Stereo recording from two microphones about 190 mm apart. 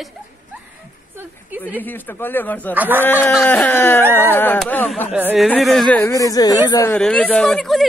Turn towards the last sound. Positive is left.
turn(degrees=0)  # may be behind; listen again after turning